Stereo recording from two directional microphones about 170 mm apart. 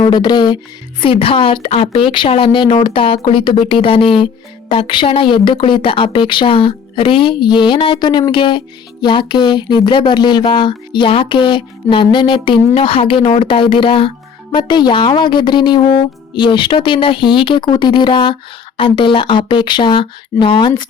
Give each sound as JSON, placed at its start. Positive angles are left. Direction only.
{"t": 0.0, "sound": "a woman's voice", "side_deg": 25}